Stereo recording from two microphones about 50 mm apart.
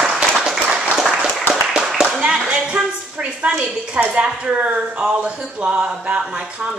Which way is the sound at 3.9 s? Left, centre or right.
Right.